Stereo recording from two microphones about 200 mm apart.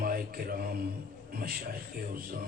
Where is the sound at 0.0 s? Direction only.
45° right (ahead or behind).